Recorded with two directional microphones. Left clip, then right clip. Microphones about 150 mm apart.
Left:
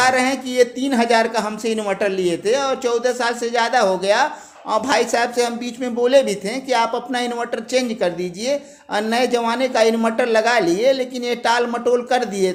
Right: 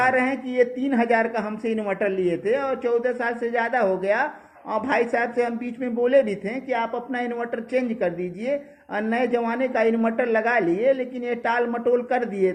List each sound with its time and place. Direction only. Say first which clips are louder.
0.0 s a woman's voice: left 4 dB; 20° left (ahead or behind)